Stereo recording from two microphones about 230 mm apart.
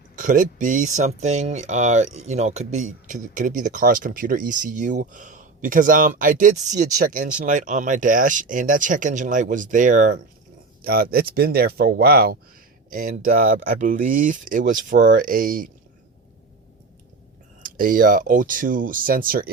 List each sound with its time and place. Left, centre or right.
0.2 s speech: right
17.6 s speech: right